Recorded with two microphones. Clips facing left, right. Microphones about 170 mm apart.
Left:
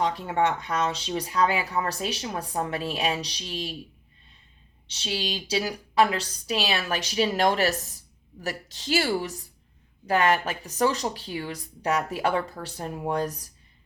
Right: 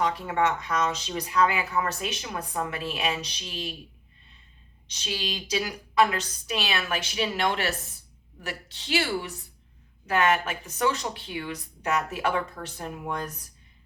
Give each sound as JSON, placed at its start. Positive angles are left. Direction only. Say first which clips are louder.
{"t": 0.0, "sound": "speech", "louder": "left 1 dB", "side_deg": 30}
{"t": 4.9, "sound": "speech", "louder": "left 2 dB", "side_deg": 30}